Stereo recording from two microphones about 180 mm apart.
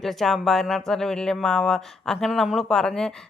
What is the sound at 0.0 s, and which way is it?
Speech, centre (ahead or behind).